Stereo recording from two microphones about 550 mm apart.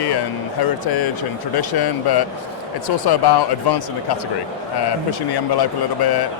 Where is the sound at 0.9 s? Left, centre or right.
Left.